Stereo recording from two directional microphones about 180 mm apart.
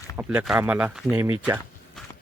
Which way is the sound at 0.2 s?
5° right (ahead or behind).